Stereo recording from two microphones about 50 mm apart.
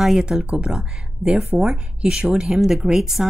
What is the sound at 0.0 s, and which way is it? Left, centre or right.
A woman's voice, centre.